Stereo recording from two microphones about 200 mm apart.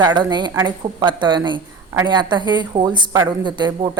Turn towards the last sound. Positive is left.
turn(degrees=-25)  # may be behind; listen again after turning